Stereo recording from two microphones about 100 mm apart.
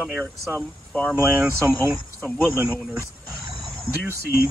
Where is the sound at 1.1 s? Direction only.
20° right (ahead or behind).